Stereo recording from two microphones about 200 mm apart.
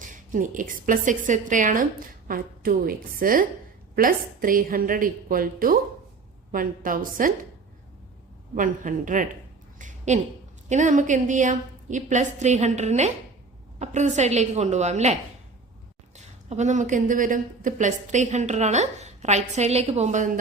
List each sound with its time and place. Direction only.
0.0 s a woman's voice: 40° right (ahead or behind)
8.5 s a woman's voice: 40° right (ahead or behind)
9.7 s a sound: 40° right (ahead or behind)
10.7 s a woman's voice: 35° right (ahead or behind)